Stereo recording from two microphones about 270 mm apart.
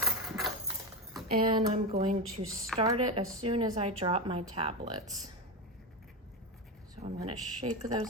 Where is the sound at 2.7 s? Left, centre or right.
Right.